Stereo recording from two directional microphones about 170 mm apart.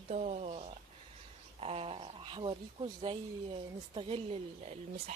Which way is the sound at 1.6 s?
35° right (ahead or behind).